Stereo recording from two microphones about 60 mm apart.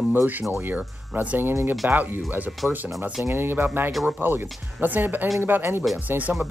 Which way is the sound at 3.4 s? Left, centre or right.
Right.